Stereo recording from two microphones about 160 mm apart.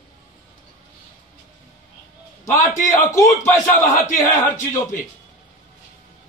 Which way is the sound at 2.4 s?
20° left (ahead or behind).